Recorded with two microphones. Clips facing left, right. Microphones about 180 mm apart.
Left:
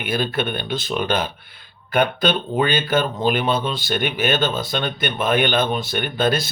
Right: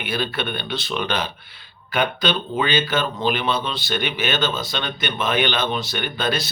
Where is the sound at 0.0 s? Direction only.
50° left (ahead or behind).